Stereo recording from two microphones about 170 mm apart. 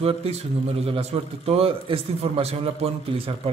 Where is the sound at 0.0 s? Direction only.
35° right (ahead or behind).